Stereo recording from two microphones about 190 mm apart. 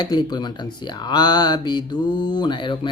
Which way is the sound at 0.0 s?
20° left (ahead or behind).